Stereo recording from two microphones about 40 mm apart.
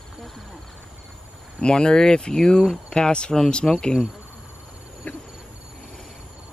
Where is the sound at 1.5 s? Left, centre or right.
Left.